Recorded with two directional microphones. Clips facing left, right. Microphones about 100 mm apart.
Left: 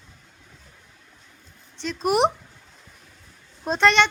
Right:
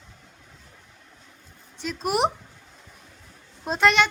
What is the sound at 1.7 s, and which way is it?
Speech, 5° right (ahead or behind).